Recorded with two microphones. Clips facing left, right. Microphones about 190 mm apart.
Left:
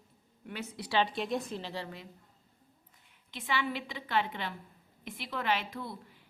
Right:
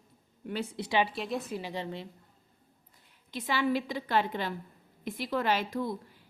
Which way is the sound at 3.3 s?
40° right (ahead or behind).